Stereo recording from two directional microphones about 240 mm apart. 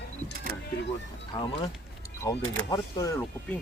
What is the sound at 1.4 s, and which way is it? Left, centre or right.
Speech, left.